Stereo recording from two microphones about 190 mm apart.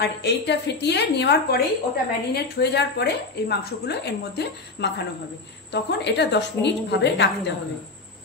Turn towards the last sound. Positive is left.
turn(degrees=65)  # may be behind; listen again after turning